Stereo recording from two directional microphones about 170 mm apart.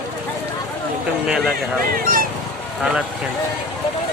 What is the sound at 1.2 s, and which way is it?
Speech, 5° right (ahead or behind).